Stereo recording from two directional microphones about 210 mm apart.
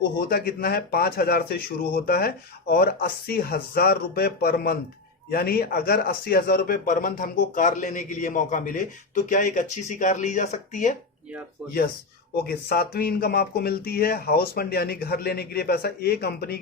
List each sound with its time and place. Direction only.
0.3 s speech: 45° left (ahead or behind)
11.6 s speech: centre (ahead or behind)
12.5 s speech: 45° left (ahead or behind)